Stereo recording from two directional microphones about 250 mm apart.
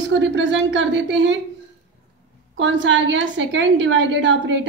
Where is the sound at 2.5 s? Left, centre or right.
Right.